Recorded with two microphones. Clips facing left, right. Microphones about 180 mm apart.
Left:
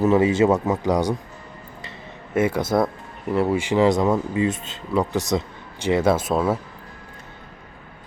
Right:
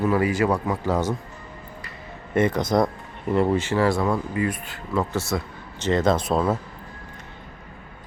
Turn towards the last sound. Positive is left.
turn(degrees=5)  # may be behind; listen again after turning